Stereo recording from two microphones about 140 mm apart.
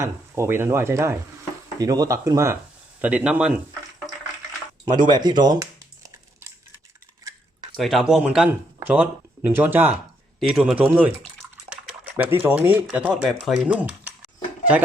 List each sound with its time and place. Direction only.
0.0 s speech: 15° right (ahead or behind)
3.0 s speech: 10° right (ahead or behind)
4.9 s speech: 30° right (ahead or behind)
7.8 s speech: centre (ahead or behind)
10.4 s speech: 5° right (ahead or behind)
12.1 s speech: 15° right (ahead or behind)
13.1 s speech: centre (ahead or behind)